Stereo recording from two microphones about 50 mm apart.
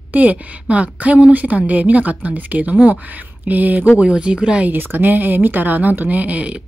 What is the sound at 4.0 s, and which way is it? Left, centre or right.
Speech, right.